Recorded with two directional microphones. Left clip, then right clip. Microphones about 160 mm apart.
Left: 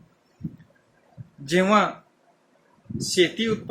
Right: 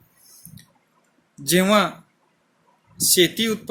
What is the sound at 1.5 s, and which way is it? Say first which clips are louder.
Speech: right 2 dB; 60° right (ahead or behind).